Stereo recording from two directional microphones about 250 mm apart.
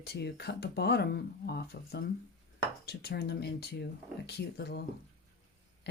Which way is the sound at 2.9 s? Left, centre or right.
Left.